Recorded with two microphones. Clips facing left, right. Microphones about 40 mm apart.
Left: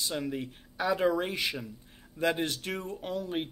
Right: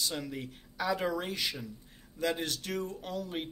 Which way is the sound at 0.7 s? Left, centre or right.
Centre.